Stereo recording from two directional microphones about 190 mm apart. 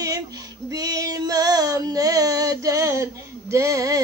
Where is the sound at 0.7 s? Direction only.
20° right (ahead or behind).